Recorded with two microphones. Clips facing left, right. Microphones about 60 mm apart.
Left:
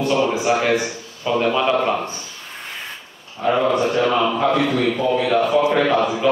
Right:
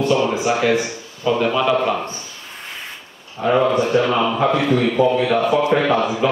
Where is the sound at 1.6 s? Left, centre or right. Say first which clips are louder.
Right 1 dB; centre.